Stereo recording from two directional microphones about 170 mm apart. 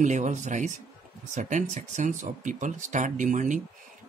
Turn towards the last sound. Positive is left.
turn(degrees=-50)  # may be behind; listen again after turning